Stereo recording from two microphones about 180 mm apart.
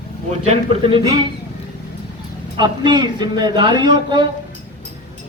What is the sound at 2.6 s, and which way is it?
Speech, 25° right (ahead or behind).